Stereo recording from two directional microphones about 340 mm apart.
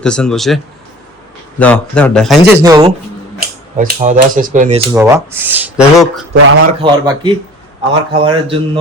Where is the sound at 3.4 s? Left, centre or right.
Right.